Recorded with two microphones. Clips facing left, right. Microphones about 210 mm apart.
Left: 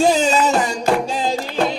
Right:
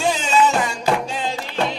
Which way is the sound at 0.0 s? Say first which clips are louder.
Left 3 dB; 40° left (ahead or behind).